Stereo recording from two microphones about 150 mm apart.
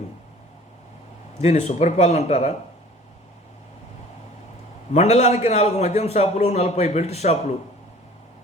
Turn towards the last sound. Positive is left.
turn(degrees=45)  # may be behind; listen again after turning